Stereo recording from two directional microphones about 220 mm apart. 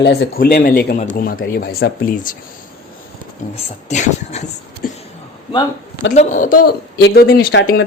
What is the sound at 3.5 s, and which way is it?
Speech, 30° left (ahead or behind).